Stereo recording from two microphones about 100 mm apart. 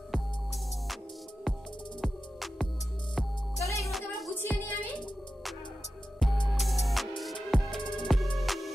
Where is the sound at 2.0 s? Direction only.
5° left (ahead or behind).